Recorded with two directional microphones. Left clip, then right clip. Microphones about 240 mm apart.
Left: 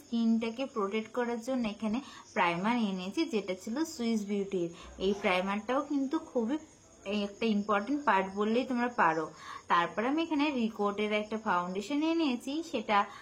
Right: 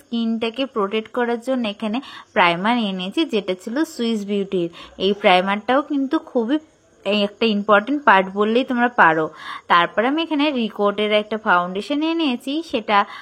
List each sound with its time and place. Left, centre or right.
0.1 s a woman's voice: right